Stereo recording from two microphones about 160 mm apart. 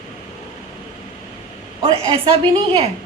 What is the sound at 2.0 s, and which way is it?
Speech, 35° right (ahead or behind).